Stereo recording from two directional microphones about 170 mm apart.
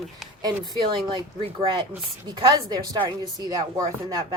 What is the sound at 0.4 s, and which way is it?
Speech, 25° right (ahead or behind).